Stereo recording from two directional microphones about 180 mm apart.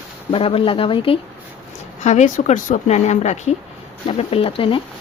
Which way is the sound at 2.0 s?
40° left (ahead or behind).